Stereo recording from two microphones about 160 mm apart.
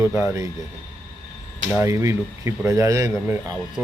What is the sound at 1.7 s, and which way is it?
Speech, 20° right (ahead or behind).